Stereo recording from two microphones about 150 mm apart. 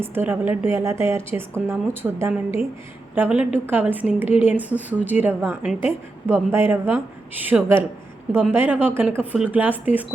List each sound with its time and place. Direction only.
0.0 s a woman's voice: 15° right (ahead or behind)